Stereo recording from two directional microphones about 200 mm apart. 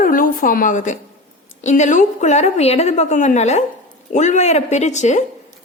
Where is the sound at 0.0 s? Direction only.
45° left (ahead or behind).